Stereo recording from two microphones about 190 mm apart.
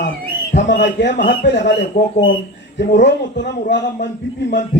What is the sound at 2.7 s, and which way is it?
A man's voice, 65° left (ahead or behind).